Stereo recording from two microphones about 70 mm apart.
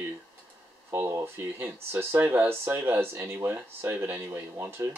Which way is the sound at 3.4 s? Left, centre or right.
Right.